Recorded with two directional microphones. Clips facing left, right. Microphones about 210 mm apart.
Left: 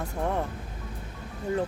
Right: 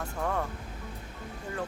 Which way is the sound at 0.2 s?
20° left (ahead or behind).